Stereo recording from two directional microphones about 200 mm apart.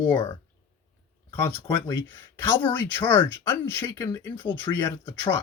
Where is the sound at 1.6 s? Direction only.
10° left (ahead or behind).